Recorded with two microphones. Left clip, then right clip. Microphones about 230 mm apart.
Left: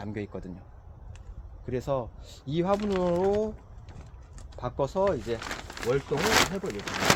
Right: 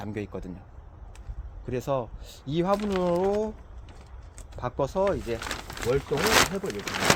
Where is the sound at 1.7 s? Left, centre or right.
Right.